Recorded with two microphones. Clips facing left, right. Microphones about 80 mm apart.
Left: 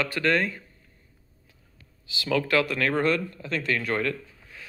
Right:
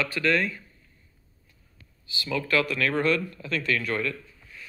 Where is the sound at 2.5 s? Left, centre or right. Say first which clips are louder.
Right 2 dB; left.